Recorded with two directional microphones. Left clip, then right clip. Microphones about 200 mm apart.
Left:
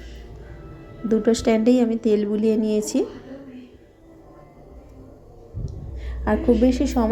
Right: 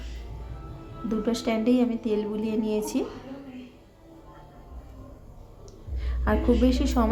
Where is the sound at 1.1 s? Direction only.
20° left (ahead or behind).